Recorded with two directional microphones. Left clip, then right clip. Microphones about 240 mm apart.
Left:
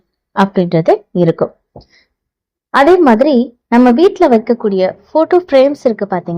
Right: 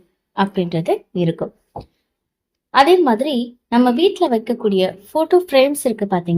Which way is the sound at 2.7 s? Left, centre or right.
Left.